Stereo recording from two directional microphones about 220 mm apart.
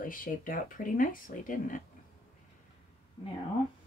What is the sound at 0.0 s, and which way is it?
Speech, 40° left (ahead or behind).